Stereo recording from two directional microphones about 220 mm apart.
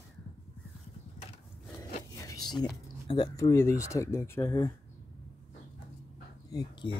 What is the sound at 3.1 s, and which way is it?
Speech, 20° left (ahead or behind).